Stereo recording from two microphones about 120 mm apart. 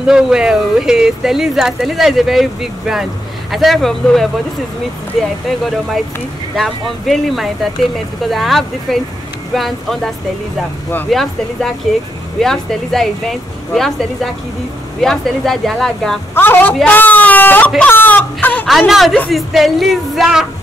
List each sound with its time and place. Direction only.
0.0 s speech: 5° right (ahead or behind)
6.5 s speech: centre (ahead or behind)
11.1 s speech: centre (ahead or behind)
16.3 s speech: 15° left (ahead or behind)
18.7 s speech: centre (ahead or behind)